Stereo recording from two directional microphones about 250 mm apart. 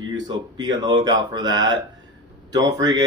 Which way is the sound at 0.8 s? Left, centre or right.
Centre.